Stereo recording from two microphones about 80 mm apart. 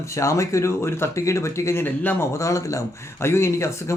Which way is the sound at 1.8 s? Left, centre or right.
Left.